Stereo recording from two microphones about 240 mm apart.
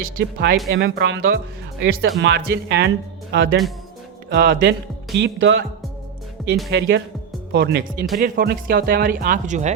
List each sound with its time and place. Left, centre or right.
0.0 s speech: right
5.1 s speech: right
6.7 s speech: right